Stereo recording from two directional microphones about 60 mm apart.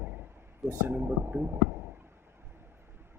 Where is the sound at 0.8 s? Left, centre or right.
Right.